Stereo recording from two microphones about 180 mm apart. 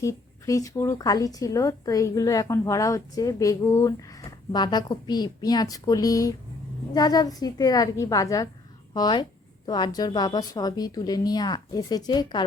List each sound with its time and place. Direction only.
0.0 s speech: 15° left (ahead or behind)